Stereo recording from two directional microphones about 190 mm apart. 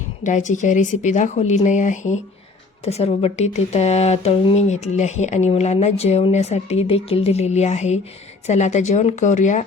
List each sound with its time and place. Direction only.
0.2 s speech: 40° left (ahead or behind)